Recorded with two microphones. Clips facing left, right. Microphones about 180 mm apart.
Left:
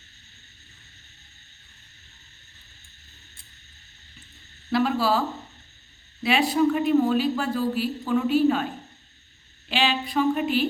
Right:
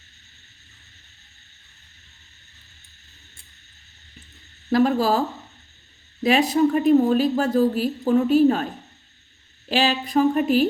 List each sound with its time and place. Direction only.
4.7 s a woman's voice: 45° right (ahead or behind)
6.2 s a woman's voice: 40° right (ahead or behind)
9.6 s a woman's voice: 40° right (ahead or behind)